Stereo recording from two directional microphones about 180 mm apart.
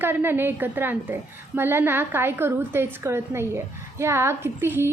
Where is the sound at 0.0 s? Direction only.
10° right (ahead or behind).